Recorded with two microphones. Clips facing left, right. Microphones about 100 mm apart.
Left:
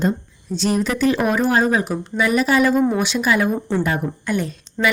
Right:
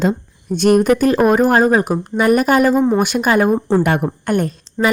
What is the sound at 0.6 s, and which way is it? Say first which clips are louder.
Speech: right 8 dB; 55° right (ahead or behind).